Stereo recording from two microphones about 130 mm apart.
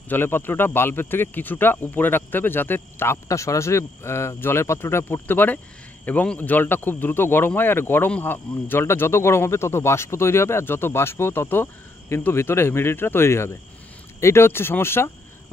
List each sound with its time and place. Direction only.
0.1 s speech: 15° left (ahead or behind)